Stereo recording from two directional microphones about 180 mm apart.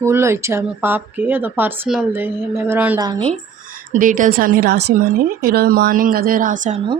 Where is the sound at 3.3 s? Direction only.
45° right (ahead or behind).